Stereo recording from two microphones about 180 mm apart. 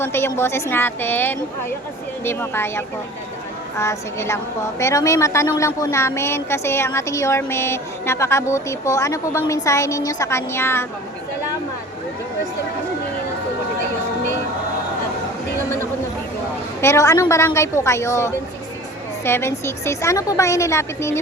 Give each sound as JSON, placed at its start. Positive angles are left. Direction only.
{"t": 0.0, "sound": "a woman's voice", "side_deg": 15}
{"t": 16.8, "sound": "a woman's voice", "side_deg": 15}